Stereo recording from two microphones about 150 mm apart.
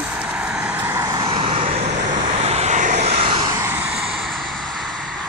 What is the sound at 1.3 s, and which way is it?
Vehicle, 40° right (ahead or behind).